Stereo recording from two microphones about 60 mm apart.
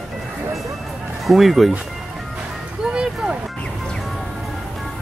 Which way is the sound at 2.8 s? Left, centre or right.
Centre.